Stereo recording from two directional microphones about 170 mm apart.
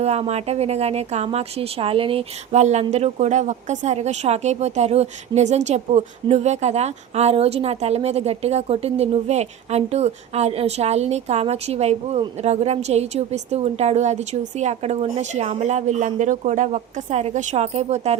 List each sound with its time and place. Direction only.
0.0 s speech: 40° right (ahead or behind)